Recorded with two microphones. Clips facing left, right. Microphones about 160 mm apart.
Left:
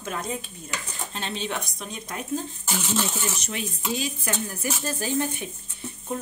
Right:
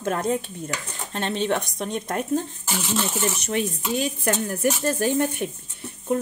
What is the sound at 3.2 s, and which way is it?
Speech, 55° right (ahead or behind).